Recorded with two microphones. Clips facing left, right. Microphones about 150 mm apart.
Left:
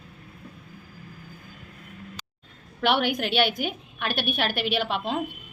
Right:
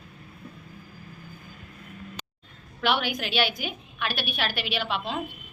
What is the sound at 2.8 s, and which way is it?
A woman's voice, 55° left (ahead or behind).